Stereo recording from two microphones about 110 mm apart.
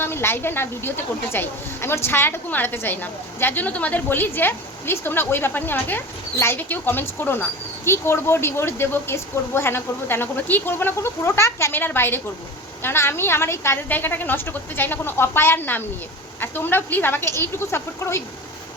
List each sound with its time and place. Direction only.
0.0 s a woman's voice: 20° left (ahead or behind)